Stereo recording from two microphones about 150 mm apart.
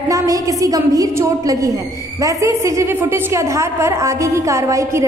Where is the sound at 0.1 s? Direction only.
20° right (ahead or behind).